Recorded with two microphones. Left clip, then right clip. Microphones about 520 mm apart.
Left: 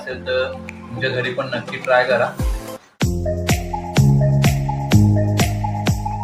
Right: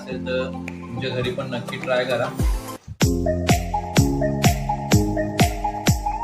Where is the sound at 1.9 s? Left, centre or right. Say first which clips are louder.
Left 7 dB; right.